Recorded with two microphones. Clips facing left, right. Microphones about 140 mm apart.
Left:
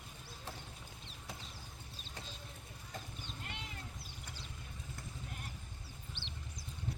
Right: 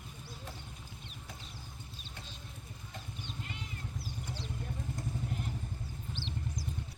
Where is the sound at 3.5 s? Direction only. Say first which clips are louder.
Right 2 dB; 75° left (ahead or behind).